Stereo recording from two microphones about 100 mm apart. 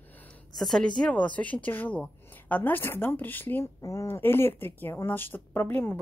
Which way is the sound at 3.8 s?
30° left (ahead or behind).